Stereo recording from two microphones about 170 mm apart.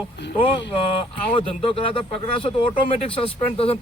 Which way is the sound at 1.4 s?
30° left (ahead or behind).